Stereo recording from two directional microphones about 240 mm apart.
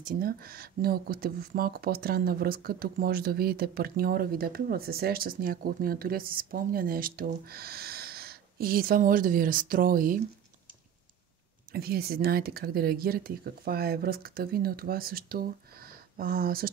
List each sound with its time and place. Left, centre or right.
0.0 s speech: right
11.7 s speech: right